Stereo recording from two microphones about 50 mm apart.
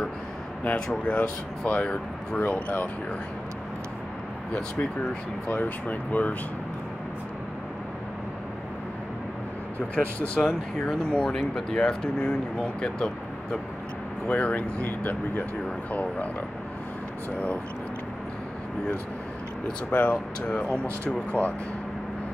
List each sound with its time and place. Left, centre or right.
0.7 s speech: centre
5.5 s speech: left
9.8 s speech: left
11.3 s speech: centre
11.8 s speech: centre
14.2 s speech: left
19.9 s speech: left
20.5 s speech: left